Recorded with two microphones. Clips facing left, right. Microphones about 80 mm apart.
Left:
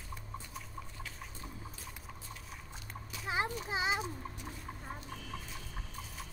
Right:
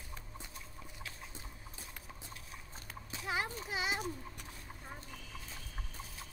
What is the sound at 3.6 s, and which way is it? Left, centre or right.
Speech, left.